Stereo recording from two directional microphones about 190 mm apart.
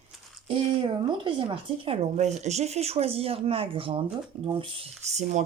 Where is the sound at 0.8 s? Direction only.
25° right (ahead or behind).